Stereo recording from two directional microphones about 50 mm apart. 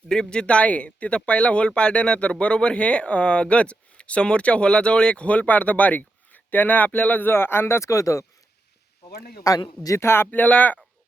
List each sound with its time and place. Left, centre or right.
0.1 s speech: centre; by 7.3 s left
7.3 s speech: left
7.8 s speech: left
9.9 s speech: left
10.3 s speech: left